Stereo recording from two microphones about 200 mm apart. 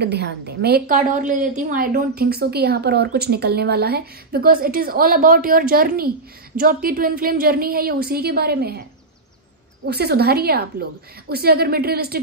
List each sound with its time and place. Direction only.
0.0 s a woman's voice: 55° right (ahead or behind)
9.8 s a woman's voice: 55° right (ahead or behind)